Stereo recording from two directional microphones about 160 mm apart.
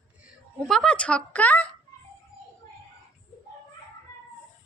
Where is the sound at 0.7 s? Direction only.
5° left (ahead or behind).